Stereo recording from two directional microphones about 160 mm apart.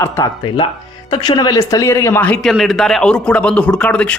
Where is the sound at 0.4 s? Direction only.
30° left (ahead or behind); by 2.4 s 10° left (ahead or behind).